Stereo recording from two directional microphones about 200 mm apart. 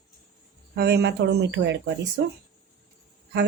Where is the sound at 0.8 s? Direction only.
55° right (ahead or behind).